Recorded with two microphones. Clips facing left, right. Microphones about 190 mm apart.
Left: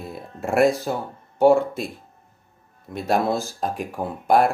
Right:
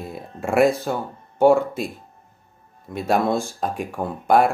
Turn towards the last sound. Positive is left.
turn(degrees=0)  # may be behind; listen again after turning